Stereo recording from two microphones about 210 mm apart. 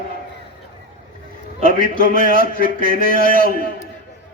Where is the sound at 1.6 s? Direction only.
40° right (ahead or behind).